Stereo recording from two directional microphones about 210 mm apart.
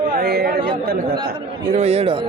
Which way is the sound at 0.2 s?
50° right (ahead or behind).